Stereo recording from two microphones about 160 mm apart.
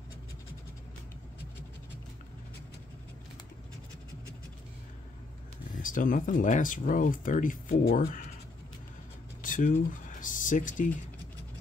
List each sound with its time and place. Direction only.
5.8 s speech: 55° left (ahead or behind)
9.4 s speech: 55° left (ahead or behind)